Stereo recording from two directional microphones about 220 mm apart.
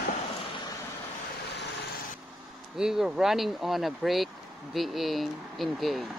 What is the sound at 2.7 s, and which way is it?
Speech, 5° right (ahead or behind).